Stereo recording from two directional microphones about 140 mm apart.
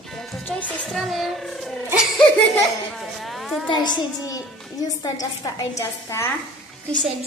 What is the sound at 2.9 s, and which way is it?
Speech, centre (ahead or behind).